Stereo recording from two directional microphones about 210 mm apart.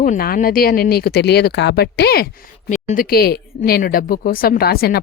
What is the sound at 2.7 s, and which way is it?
A woman's voice, 40° left (ahead or behind).